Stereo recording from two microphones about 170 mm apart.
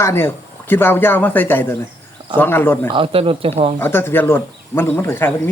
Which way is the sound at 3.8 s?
15° left (ahead or behind).